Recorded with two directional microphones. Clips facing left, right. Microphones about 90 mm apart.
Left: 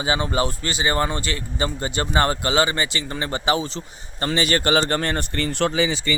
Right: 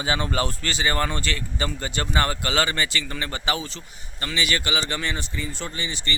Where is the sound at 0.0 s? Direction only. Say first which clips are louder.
Left 3 dB; 20° left (ahead or behind); by 5.8 s 75° left (ahead or behind).